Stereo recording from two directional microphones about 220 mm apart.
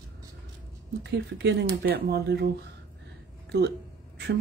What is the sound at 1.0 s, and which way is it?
A woman's voice, 55° right (ahead or behind).